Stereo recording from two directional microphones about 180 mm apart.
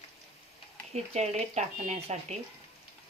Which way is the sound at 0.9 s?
40° right (ahead or behind).